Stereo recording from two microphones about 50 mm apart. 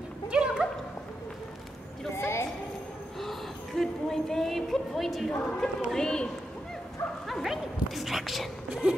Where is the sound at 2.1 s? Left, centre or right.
Left.